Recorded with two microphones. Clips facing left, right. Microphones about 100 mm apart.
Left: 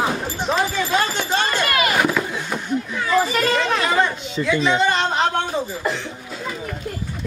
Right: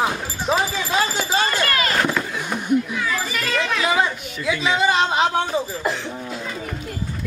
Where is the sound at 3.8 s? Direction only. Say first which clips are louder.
Left 1 dB; 5° right (ahead or behind).